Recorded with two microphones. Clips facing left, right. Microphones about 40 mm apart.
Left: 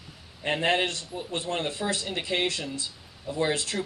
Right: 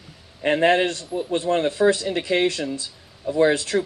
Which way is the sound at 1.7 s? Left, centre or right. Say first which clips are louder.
Right 11 dB; right.